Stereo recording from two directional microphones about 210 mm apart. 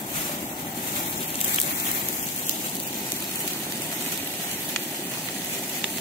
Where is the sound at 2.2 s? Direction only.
30° left (ahead or behind).